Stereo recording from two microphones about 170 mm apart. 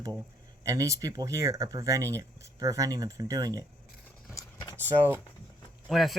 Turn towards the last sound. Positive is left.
turn(degrees=0)  # may be behind; listen again after turning